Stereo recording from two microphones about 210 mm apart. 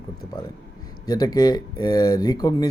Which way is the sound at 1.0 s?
20° left (ahead or behind).